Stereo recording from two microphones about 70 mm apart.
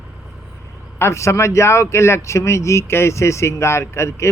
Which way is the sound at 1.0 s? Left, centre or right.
Left.